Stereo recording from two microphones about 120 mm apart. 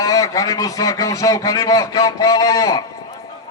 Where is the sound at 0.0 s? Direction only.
30° left (ahead or behind).